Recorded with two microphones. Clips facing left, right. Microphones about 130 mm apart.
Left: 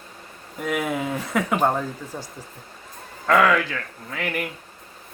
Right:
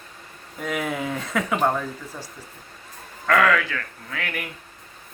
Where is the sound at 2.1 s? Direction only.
25° left (ahead or behind).